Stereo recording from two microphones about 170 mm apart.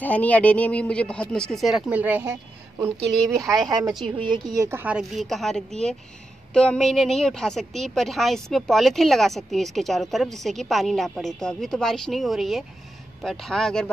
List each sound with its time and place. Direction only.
0.0 s speech: 10° left (ahead or behind)
1.9 s a woman's voice: 10° right (ahead or behind)
3.6 s a woman's voice: 20° right (ahead or behind); by 13.8 s 5° left (ahead or behind)